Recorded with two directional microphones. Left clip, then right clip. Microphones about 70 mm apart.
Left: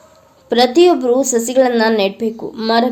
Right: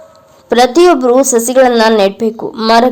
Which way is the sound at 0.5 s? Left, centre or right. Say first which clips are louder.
Right 4 dB; right.